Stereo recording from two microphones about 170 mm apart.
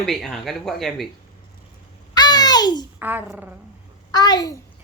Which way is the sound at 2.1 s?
25° left (ahead or behind).